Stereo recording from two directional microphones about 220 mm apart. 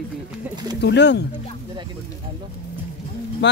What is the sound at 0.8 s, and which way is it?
Speech, 50° left (ahead or behind).